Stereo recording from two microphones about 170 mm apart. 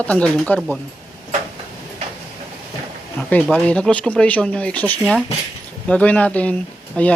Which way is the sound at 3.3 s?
10° left (ahead or behind).